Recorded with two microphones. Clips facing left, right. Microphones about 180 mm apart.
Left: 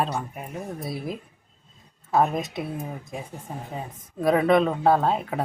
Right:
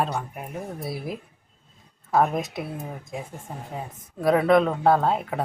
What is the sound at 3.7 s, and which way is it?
Speech, centre (ahead or behind).